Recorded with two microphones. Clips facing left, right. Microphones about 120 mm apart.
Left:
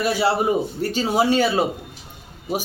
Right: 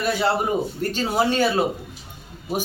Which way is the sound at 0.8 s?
10° left (ahead or behind).